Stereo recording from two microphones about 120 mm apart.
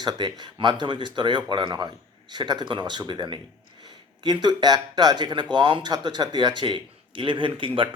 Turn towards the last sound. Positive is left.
turn(degrees=-45)  # may be behind; listen again after turning